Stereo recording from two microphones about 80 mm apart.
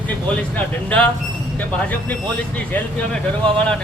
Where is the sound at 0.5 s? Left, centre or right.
Centre.